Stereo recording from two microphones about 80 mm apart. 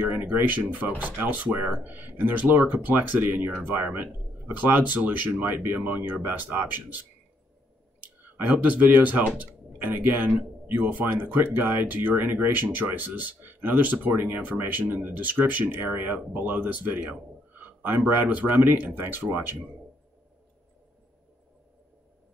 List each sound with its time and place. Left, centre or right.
0.0 s speech: right
8.0 s speech: right